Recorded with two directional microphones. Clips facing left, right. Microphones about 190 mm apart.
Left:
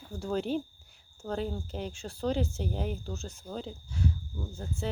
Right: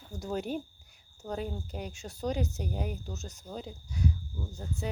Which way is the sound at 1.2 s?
20° right (ahead or behind).